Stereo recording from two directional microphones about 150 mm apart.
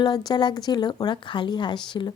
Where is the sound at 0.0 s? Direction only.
30° left (ahead or behind).